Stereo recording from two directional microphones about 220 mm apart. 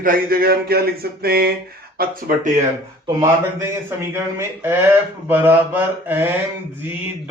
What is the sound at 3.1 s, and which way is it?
Speech, 15° right (ahead or behind).